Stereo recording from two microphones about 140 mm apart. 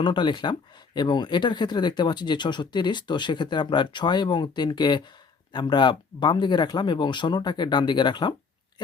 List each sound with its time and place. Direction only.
0.0 s speech: 35° left (ahead or behind)